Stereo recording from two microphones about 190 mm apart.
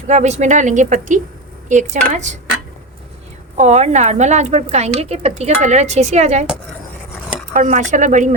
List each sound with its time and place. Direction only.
0.1 s a woman's voice: 35° right (ahead or behind)
3.6 s a woman's voice: 35° right (ahead or behind)
7.5 s a woman's voice: 40° right (ahead or behind)